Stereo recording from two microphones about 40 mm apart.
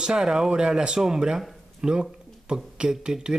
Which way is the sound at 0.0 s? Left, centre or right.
Centre.